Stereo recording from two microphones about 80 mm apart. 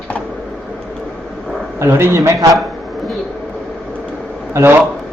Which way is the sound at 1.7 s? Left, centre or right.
Right.